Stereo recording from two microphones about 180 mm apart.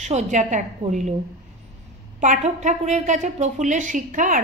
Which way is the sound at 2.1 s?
45° right (ahead or behind).